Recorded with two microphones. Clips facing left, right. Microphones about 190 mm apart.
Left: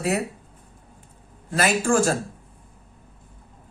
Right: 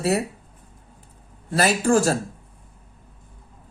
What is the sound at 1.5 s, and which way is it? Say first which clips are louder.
Speech: right 2 dB; 40° right (ahead or behind).